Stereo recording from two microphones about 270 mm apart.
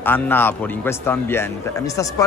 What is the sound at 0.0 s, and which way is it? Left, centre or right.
A man's voice, centre.